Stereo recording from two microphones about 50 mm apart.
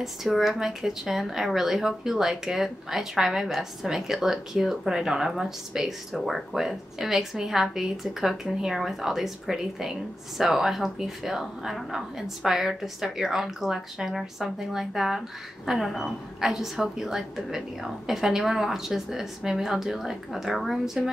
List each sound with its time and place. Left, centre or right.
0.0 s speech: centre